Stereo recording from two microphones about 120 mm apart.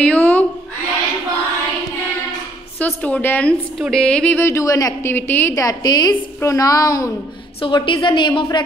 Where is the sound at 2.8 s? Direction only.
10° left (ahead or behind).